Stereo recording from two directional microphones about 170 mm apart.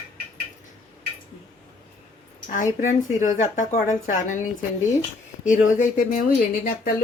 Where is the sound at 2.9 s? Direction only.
45° left (ahead or behind).